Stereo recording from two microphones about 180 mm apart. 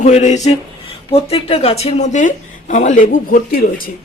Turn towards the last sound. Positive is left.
turn(degrees=55)  # may be behind; listen again after turning